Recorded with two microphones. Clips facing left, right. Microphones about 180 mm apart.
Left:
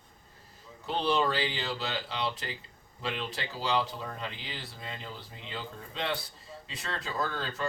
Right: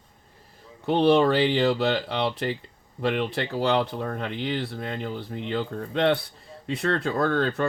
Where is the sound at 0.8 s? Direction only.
60° right (ahead or behind).